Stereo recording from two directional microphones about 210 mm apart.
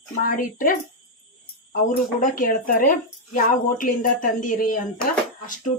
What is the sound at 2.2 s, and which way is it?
Speech, 40° left (ahead or behind).